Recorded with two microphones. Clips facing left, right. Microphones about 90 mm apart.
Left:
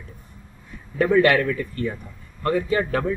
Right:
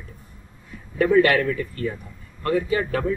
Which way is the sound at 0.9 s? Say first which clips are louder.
Even; 25° left (ahead or behind).